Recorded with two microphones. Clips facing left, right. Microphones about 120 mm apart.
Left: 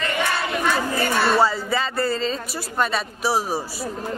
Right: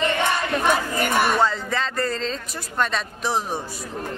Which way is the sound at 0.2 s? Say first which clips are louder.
Right 1 dB; 15° right (ahead or behind).